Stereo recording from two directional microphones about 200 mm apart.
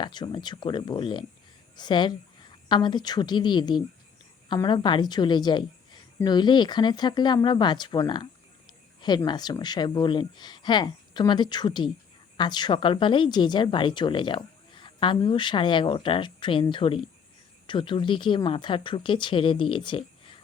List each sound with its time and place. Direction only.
0.0 s a woman's voice: 20° left (ahead or behind)